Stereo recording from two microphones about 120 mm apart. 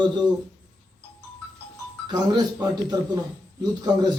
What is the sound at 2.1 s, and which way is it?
Speech, 35° right (ahead or behind).